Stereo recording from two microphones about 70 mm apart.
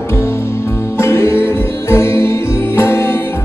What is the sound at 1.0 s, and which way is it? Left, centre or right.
Music, left.